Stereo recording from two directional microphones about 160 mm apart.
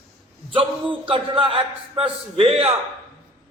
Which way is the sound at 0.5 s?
30° right (ahead or behind).